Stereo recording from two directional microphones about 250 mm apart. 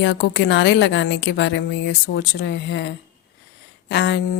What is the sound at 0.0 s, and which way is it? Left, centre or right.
A woman's voice, left.